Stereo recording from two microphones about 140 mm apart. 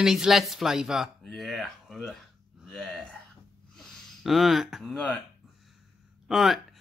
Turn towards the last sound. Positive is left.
turn(degrees=0)  # may be behind; listen again after turning